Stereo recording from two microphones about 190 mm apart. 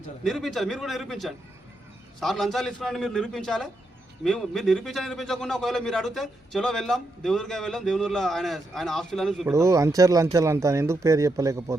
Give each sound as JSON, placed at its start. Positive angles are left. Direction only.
{"t": 0.3, "sound": "a man's voice", "side_deg": 0}
{"t": 9.5, "sound": "speech", "side_deg": -15}